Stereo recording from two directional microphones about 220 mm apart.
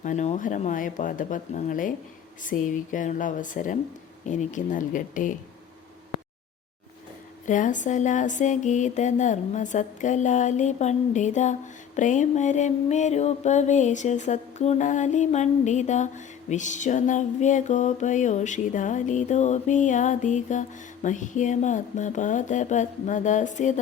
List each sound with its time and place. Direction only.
0.0 s music: 35° left (ahead or behind)
7.4 s music: 35° left (ahead or behind)